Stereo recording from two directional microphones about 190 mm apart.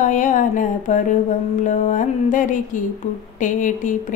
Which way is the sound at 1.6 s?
40° left (ahead or behind).